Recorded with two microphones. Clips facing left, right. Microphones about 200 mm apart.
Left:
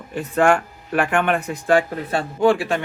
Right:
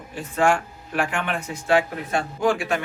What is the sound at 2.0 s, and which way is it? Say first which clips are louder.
Speech: left 5 dB; 35° left (ahead or behind).